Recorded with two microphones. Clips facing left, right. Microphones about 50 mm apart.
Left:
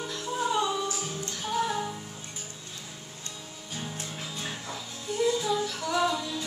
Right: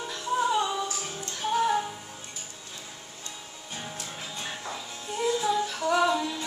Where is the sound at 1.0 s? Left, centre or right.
Right.